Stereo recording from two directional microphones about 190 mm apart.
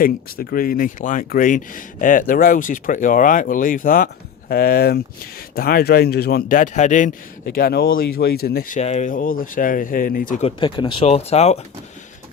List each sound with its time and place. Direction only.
0.0 s speech: 50° left (ahead or behind)
7.5 s speech: 50° left (ahead or behind)
10.4 s speech: 25° left (ahead or behind)